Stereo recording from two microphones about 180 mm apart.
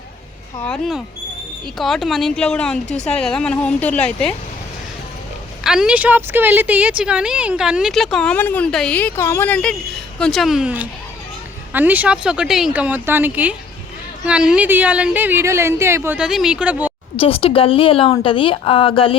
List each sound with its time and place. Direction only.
0.6 s a woman's voice: centre (ahead or behind)
5.6 s a woman's voice: 5° right (ahead or behind)
17.2 s a woman's voice: 30° left (ahead or behind)